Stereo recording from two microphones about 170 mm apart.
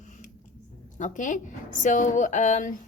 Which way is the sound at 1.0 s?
50° left (ahead or behind).